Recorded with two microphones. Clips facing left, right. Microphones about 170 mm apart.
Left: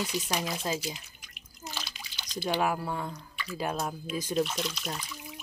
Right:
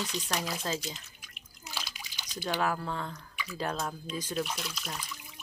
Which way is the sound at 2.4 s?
15° left (ahead or behind).